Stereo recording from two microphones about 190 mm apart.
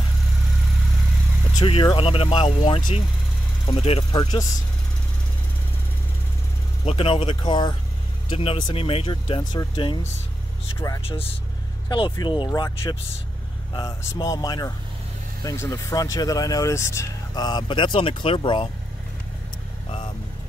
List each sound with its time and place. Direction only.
1.6 s speech: 25° left (ahead or behind)
4.2 s speech: 20° left (ahead or behind)
6.8 s speech: 30° left (ahead or behind)
11.0 s speech: 30° left (ahead or behind)